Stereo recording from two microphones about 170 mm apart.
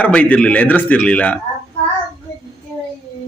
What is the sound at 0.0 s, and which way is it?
Speech, 10° left (ahead or behind).